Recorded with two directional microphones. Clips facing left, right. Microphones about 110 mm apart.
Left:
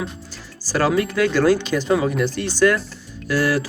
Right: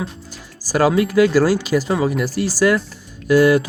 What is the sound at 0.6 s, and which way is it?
Speech, 10° right (ahead or behind).